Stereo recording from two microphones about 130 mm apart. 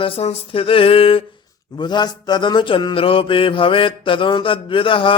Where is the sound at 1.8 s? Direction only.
35° left (ahead or behind).